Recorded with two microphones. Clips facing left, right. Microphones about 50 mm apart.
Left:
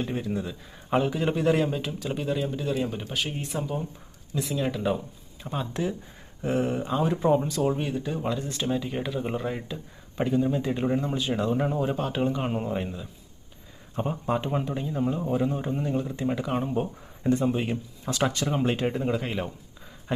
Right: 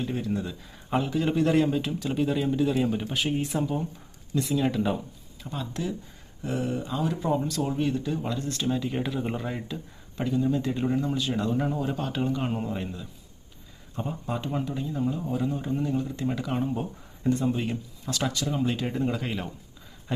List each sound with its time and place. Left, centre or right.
0.1 s speech: centre
5.4 s a man's voice: left; by 9.8 s centre
10.2 s a man's voice: left
13.9 s a man's voice: left; by 16.7 s centre
17.2 s a man's voice: left
18.9 s speech: centre
20.1 s a sound: centre